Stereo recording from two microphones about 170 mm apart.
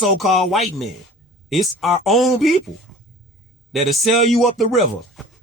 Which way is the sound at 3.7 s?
Centre (ahead or behind).